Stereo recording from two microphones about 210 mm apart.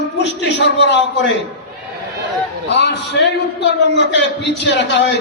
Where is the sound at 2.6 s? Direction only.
55° left (ahead or behind).